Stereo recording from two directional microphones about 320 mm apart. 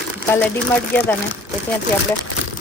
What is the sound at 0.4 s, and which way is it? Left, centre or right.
Speech, centre.